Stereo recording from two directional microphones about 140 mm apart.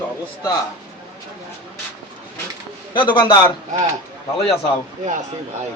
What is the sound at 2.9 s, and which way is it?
Speech, 35° left (ahead or behind).